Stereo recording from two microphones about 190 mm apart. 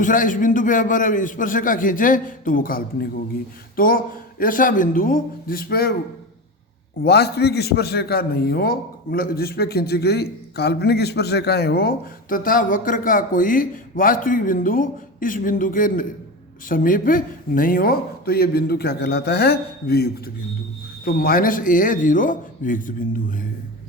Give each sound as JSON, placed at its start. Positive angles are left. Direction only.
{"t": 0.0, "sound": "a man's voice", "side_deg": 45}
{"t": 7.0, "sound": "a man's voice", "side_deg": 60}